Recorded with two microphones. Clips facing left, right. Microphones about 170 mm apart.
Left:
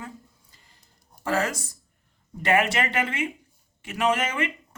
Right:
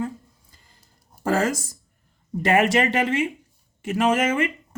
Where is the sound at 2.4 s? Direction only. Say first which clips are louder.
Right 4 dB; 35° right (ahead or behind).